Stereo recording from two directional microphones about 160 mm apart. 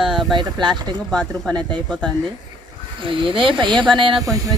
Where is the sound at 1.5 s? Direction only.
25° right (ahead or behind).